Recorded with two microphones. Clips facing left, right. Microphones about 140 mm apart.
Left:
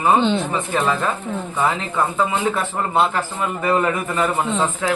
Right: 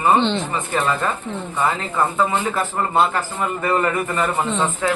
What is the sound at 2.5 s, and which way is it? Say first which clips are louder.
Speech: right 1 dB; centre (ahead or behind).